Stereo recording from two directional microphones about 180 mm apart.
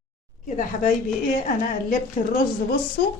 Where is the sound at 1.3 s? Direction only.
45° left (ahead or behind).